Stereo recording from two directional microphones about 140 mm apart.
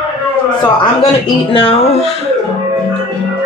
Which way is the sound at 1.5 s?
40° left (ahead or behind).